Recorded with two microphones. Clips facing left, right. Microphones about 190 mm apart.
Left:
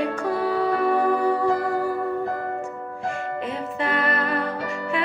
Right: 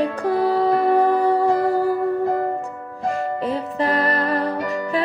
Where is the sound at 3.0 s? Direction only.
35° right (ahead or behind).